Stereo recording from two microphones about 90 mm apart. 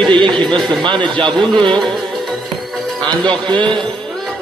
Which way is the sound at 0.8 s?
60° right (ahead or behind).